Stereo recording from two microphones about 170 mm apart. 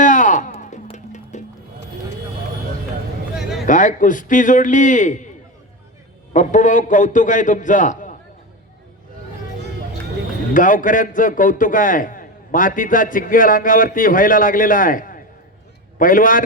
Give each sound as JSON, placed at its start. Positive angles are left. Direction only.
{"t": 0.0, "sound": "a sound", "side_deg": 50}
{"t": 0.6, "sound": "music", "side_deg": 45}
{"t": 3.7, "sound": "a man's voice", "side_deg": 50}
{"t": 6.3, "sound": "a man's voice", "side_deg": 45}
{"t": 10.5, "sound": "a man's voice", "side_deg": 50}